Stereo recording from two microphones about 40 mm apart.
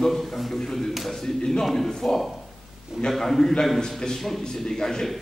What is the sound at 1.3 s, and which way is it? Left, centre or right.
Speech, centre.